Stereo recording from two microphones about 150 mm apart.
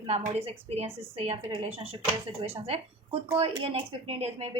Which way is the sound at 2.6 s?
40° right (ahead or behind).